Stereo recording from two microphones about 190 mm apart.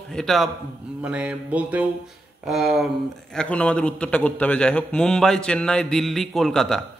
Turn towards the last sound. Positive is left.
turn(degrees=0)  # may be behind; listen again after turning